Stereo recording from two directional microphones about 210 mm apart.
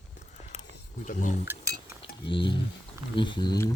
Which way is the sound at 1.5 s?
15° right (ahead or behind).